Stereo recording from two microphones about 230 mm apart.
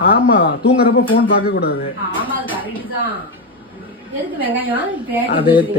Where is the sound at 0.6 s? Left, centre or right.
Left.